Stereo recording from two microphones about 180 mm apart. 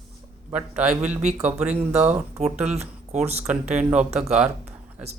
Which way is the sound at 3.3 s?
10° right (ahead or behind).